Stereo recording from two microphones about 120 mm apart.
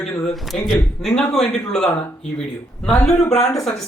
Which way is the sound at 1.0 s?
5° left (ahead or behind).